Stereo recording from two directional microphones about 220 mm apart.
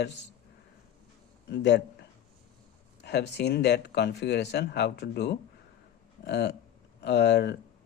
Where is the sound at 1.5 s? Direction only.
50° left (ahead or behind).